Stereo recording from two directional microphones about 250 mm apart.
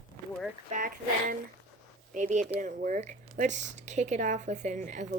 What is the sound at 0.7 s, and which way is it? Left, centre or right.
Speech, right.